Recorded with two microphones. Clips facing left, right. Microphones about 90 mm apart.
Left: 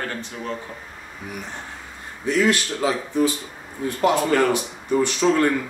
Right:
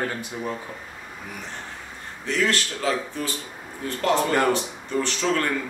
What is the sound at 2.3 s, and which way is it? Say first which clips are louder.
Speech: left 4 dB; 15° left (ahead or behind).